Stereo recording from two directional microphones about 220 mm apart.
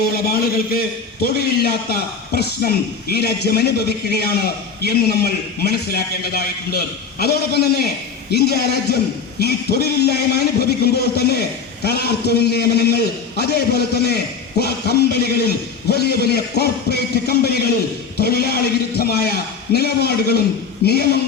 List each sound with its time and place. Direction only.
0.0 s a man's voice: 45° left (ahead or behind)